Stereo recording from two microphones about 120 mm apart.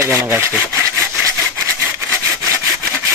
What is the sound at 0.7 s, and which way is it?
Sawing, 25° right (ahead or behind).